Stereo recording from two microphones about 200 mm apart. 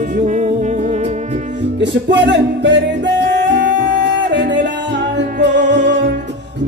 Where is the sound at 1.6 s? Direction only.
60° right (ahead or behind).